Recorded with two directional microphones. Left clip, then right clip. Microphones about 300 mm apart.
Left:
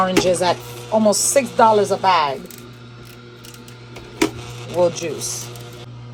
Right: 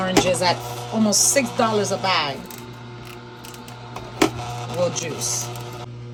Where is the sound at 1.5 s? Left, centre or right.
Centre.